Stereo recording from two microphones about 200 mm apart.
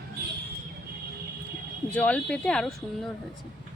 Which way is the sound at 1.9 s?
5° left (ahead or behind).